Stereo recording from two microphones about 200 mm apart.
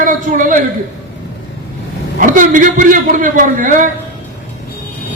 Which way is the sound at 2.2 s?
40° right (ahead or behind).